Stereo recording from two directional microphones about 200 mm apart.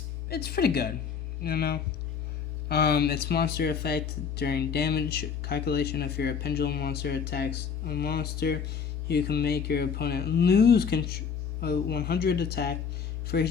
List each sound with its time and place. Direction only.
0.3 s speech: 50° left (ahead or behind)